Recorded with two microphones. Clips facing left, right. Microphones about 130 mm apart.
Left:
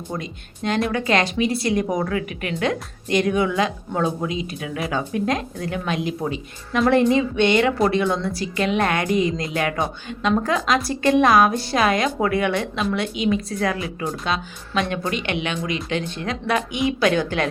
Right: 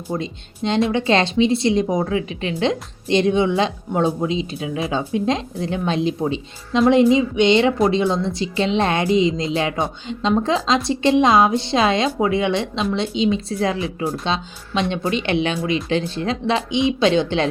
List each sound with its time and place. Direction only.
0.1 s speech: 25° right (ahead or behind)